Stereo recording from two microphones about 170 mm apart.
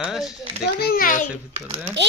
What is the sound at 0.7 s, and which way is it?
Speech, 65° left (ahead or behind).